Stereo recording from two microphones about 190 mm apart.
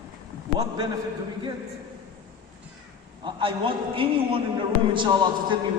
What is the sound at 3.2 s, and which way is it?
A man's voice, 25° right (ahead or behind).